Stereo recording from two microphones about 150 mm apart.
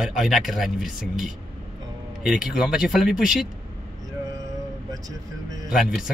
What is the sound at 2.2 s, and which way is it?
A man's voice, 5° right (ahead or behind).